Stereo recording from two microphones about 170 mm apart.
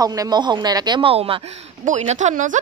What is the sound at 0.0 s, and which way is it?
A woman's voice, 20° right (ahead or behind).